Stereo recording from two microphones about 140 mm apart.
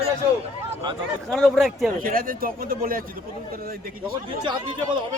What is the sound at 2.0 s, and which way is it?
Speech, 85° right.